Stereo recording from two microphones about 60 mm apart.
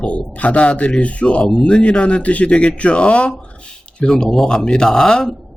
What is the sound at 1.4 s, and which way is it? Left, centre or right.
Speech, centre.